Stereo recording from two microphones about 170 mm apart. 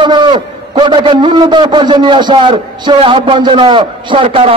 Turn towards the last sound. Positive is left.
turn(degrees=-35)  # may be behind; listen again after turning